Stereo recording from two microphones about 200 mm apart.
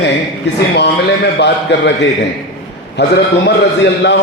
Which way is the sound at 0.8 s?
55° left (ahead or behind).